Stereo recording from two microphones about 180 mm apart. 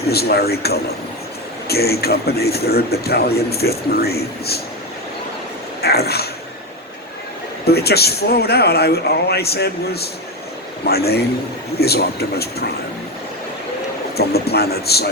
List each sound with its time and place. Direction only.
0.1 s a man's voice: 60° left (ahead or behind)
5.8 s a man's voice: 60° left (ahead or behind)
7.7 s a man's voice: 60° left (ahead or behind)
14.2 s a man's voice: 60° left (ahead or behind)